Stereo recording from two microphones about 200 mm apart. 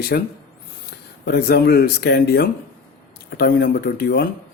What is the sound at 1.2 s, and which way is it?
Speech, 50° left (ahead or behind).